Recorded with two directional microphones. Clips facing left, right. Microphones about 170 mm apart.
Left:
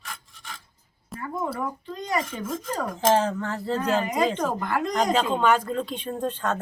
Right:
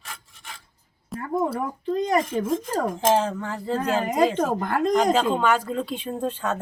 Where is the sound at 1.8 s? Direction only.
50° right (ahead or behind).